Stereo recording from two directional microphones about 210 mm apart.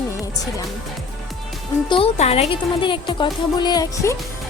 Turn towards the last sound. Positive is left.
turn(degrees=15)  # may be behind; listen again after turning